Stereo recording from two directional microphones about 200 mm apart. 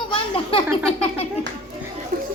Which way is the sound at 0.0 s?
25° left (ahead or behind).